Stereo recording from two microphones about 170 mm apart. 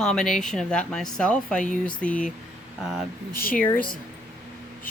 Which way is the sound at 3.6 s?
10° left (ahead or behind).